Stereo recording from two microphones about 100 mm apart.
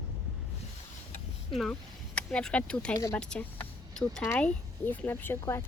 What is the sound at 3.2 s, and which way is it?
Speech, 10° left (ahead or behind).